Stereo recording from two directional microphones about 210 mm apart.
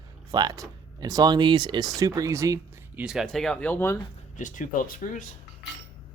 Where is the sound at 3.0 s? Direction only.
Centre (ahead or behind).